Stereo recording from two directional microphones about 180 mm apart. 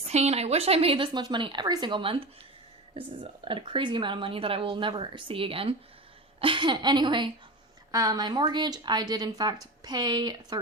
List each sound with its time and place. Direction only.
0.1 s speech: 35° right (ahead or behind)